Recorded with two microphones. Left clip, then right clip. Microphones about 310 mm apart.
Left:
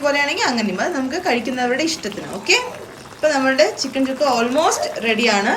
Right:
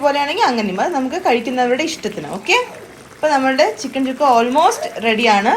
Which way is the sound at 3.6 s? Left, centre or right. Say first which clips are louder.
Right 1 dB; right.